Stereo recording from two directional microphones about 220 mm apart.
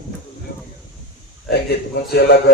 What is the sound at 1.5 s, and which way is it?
Speech, 45° left (ahead or behind).